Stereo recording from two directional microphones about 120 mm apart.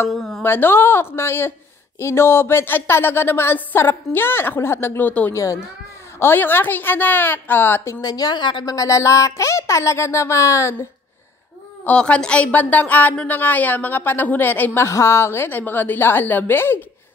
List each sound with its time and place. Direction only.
0.1 s speech: centre (ahead or behind)
0.4 s speech: 20° left (ahead or behind)
5.3 s a woman's voice: 25° left (ahead or behind)
8.0 s a woman's voice: 35° left (ahead or behind)
8.7 s speech: 25° left (ahead or behind)
11.8 s a woman's voice: 10° left (ahead or behind)